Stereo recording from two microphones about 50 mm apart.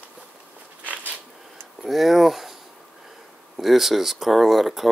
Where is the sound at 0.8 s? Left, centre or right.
Right.